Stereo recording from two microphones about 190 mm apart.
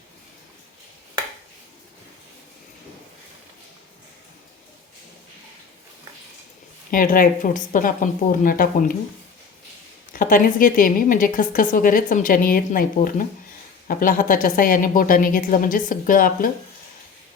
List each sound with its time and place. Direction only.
6.9 s a woman's voice: 45° left (ahead or behind)
10.1 s a woman's voice: 45° left (ahead or behind)